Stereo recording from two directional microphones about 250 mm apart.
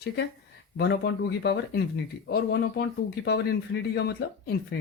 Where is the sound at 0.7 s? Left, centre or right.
Left.